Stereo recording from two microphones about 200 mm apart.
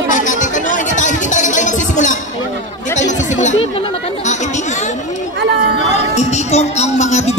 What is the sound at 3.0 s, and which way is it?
Chatter, 35° left (ahead or behind).